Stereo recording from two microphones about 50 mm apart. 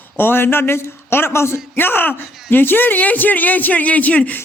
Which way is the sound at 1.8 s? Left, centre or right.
Left.